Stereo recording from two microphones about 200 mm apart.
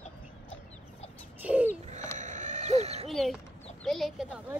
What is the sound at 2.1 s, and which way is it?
Owl, 40° right (ahead or behind).